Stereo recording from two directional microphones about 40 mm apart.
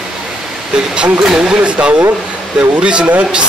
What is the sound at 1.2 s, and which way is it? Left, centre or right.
Speech, centre.